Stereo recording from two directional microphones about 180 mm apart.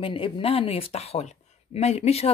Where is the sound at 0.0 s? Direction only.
30° left (ahead or behind).